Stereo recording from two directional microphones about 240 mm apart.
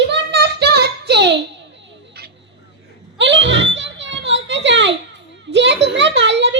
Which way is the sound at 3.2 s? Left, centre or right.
Right.